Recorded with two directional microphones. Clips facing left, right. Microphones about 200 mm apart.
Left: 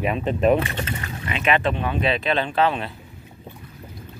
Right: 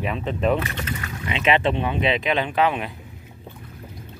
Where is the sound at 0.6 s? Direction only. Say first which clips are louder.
Left 2 dB; 30° left (ahead or behind).